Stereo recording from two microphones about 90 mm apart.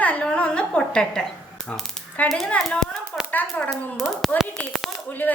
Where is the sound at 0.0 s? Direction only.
15° left (ahead or behind).